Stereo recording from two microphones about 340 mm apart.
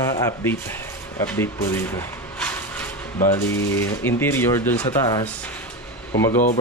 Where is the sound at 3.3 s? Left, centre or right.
Centre.